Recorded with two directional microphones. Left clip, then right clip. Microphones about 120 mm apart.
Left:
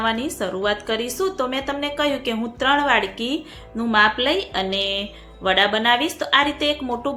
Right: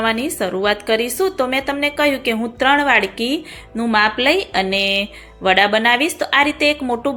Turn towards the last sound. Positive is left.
turn(degrees=-30)  # may be behind; listen again after turning